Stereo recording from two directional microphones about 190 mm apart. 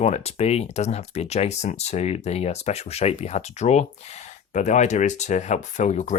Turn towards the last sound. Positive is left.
turn(degrees=35)  # may be behind; listen again after turning